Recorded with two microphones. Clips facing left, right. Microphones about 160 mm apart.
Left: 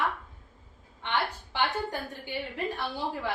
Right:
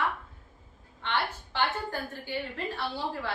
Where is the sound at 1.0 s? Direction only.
15° left (ahead or behind).